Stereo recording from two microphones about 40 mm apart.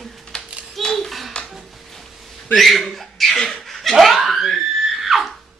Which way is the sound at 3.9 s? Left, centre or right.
Centre.